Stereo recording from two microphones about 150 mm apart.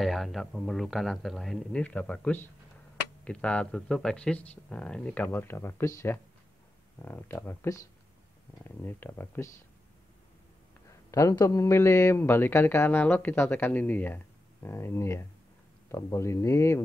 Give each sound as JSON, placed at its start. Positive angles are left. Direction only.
{"t": 0.0, "sound": "a man's voice", "side_deg": 0}
{"t": 11.1, "sound": "a man's voice", "side_deg": 20}